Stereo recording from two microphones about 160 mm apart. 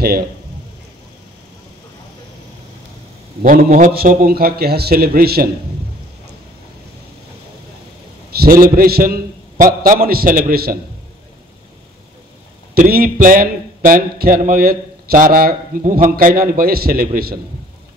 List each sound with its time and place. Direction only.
3.4 s a man's voice: 60° right (ahead or behind)
8.4 s speech: 65° right (ahead or behind)
12.7 s speech: 65° right (ahead or behind)